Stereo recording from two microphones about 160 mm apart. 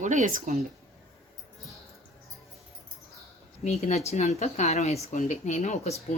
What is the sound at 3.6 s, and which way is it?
Speech, 45° left (ahead or behind).